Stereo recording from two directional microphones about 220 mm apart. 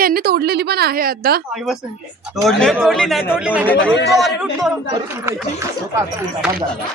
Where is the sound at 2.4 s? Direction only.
Centre (ahead or behind).